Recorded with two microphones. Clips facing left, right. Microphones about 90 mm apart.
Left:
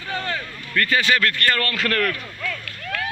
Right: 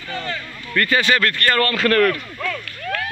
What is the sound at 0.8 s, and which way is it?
A man's voice, 45° right (ahead or behind).